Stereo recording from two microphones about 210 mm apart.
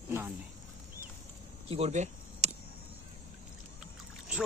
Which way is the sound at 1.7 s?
30° right (ahead or behind).